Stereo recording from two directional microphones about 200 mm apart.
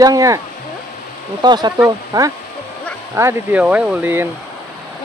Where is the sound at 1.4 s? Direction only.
20° right (ahead or behind).